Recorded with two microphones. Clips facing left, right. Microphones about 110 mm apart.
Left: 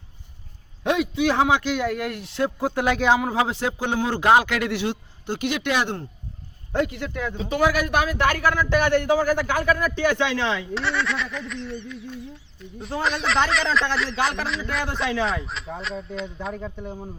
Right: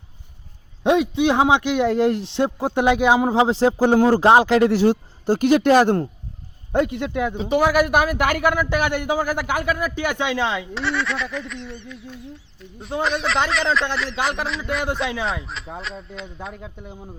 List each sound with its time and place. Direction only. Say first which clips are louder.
0.9 s speech: right 4 dB; 25° right (ahead or behind)
3.2 s speech: right 6 dB; 25° right (ahead or behind); by 6.1 s 45° right (ahead or behind)
6.7 s speech: right 4 dB; 20° right (ahead or behind)
10.8 s fowl: right 1 dB; centre (ahead or behind)